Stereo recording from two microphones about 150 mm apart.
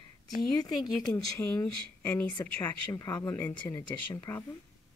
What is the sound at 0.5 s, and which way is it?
Speech, 25° left (ahead or behind).